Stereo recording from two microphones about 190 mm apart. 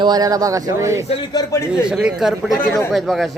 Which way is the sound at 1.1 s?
20° left (ahead or behind).